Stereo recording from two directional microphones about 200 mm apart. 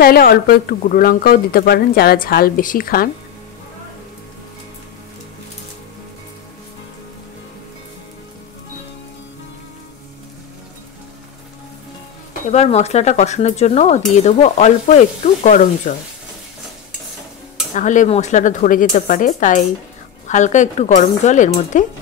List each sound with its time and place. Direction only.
0.0 s speech: 50° left (ahead or behind)
12.4 s speech: 35° left (ahead or behind)
17.7 s speech: 40° left (ahead or behind)